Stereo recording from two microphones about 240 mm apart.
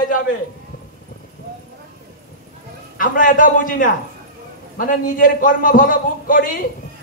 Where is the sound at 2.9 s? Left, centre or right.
Left.